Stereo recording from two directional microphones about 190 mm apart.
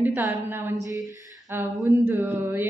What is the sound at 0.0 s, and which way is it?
A woman's voice, 10° right (ahead or behind).